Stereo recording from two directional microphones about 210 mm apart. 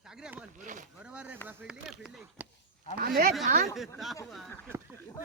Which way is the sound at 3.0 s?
45° right (ahead or behind).